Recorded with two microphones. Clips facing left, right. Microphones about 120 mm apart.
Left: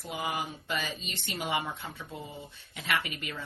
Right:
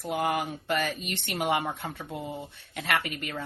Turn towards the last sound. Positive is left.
turn(degrees=-55)  # may be behind; listen again after turning